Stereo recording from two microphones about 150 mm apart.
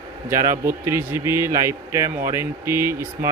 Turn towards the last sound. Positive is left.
turn(degrees=-15)  # may be behind; listen again after turning